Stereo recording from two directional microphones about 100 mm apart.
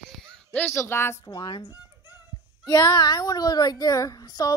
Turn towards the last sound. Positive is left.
turn(degrees=40)  # may be behind; listen again after turning